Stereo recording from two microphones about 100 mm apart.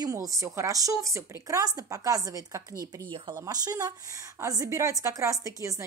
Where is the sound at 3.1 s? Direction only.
55° right (ahead or behind).